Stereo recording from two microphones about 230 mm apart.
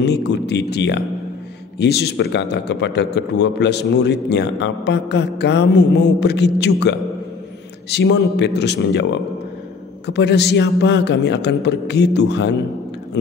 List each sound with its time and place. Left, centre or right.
0.0 s a man's voice: left